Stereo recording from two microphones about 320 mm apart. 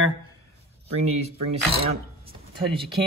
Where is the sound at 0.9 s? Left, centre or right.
Centre.